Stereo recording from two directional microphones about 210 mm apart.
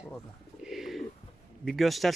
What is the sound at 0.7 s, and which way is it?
Bird, centre (ahead or behind).